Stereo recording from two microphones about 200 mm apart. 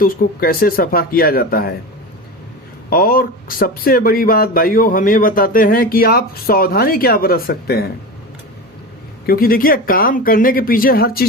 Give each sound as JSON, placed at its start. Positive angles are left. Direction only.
{"t": 0.0, "sound": "speech", "side_deg": 45}
{"t": 2.9, "sound": "speech", "side_deg": 45}
{"t": 9.2, "sound": "speech", "side_deg": 50}